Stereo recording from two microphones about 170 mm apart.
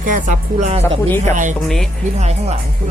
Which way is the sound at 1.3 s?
50° right (ahead or behind).